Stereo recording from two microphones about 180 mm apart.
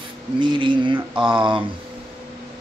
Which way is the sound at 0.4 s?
25° right (ahead or behind).